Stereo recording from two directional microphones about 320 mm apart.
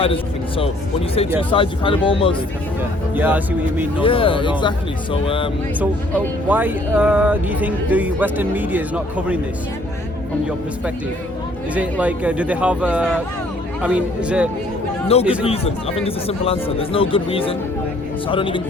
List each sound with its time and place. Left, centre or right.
0.0 s speech: centre
3.2 s speech: centre
4.0 s speech: centre
6.5 s speech: centre
11.7 s speech: centre
15.0 s speech: centre